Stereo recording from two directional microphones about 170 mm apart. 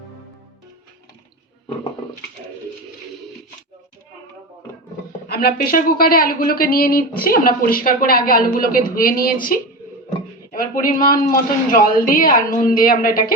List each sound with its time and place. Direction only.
5.3 s speech: 65° left (ahead or behind)